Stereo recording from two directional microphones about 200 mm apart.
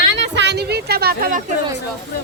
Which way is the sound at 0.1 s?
60° right (ahead or behind).